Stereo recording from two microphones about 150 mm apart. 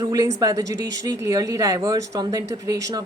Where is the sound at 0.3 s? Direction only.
20° right (ahead or behind).